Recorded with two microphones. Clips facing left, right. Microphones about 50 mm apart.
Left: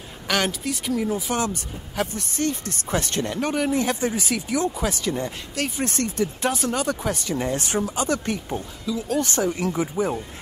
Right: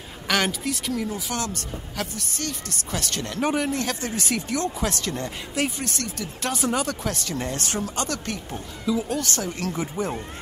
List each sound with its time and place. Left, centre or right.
0.3 s speech: centre; by 3.3 s left
3.3 s speech: centre
3.7 s speech: centre
5.8 s speech: left
6.5 s speech: centre
6.9 s speech: centre
8.9 s speech: right
9.2 s speech: centre